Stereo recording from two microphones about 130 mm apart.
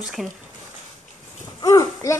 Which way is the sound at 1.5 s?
25° left (ahead or behind).